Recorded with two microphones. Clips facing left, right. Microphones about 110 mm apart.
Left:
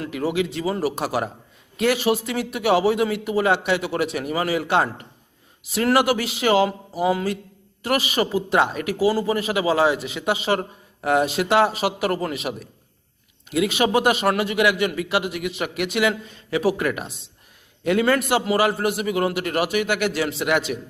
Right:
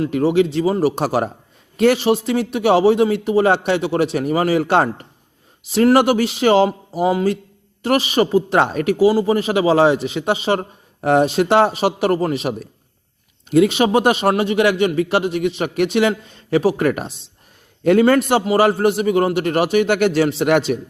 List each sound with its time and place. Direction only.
0.1 s a man's voice: 30° right (ahead or behind)